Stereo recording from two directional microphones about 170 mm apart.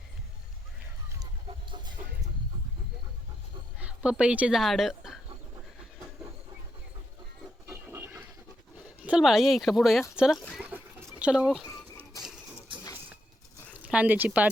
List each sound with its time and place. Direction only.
1.5 s livestock: 25° right (ahead or behind)
3.8 s speech: 5° right (ahead or behind)
7.7 s a sound: 15° right (ahead or behind)
9.0 s speech: 5° right (ahead or behind)
11.6 s a sound: 20° left (ahead or behind)
13.8 s speech: 10° right (ahead or behind)